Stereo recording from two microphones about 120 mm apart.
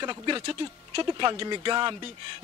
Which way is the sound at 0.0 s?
40° right (ahead or behind).